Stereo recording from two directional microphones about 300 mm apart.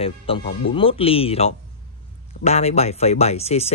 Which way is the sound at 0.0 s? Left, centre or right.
Centre.